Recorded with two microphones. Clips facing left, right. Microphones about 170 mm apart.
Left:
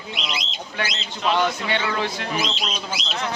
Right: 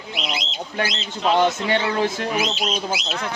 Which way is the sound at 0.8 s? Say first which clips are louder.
Right 3 dB; 35° right (ahead or behind).